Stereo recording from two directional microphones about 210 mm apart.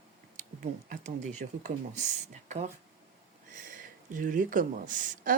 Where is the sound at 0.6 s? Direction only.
35° right (ahead or behind).